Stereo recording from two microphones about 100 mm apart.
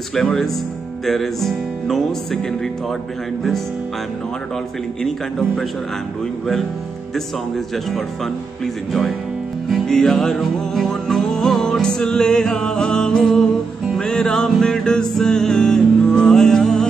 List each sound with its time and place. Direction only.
0.1 s music: 5° left (ahead or behind)
7.5 s music: centre (ahead or behind)
9.7 s music: 5° left (ahead or behind)